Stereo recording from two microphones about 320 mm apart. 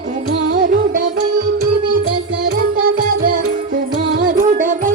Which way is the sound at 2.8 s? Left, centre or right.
Right.